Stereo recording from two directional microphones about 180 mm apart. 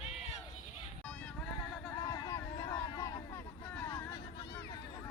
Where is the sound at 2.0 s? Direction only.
20° left (ahead or behind).